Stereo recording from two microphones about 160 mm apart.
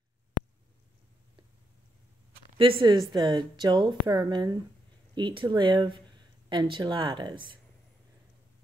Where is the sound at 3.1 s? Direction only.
25° right (ahead or behind).